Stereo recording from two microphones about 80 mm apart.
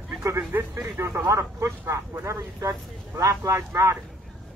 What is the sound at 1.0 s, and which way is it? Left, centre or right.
Speech, right.